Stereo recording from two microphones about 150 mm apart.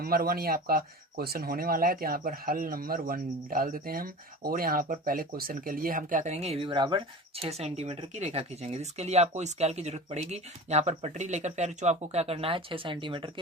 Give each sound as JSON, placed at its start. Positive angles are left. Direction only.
{"t": 0.0, "sound": "speech", "side_deg": -85}